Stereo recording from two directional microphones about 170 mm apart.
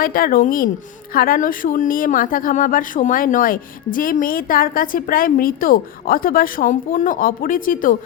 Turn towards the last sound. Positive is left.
turn(degrees=55)  # may be behind; listen again after turning